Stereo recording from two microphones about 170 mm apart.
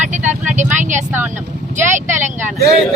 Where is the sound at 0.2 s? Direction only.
10° right (ahead or behind).